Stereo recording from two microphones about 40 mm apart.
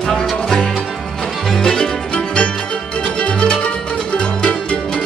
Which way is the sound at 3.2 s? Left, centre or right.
Left.